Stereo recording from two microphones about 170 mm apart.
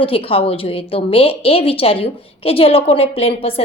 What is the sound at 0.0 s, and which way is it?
A woman's voice, 35° left (ahead or behind).